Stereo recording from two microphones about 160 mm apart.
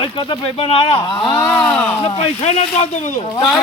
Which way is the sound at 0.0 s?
30° left (ahead or behind).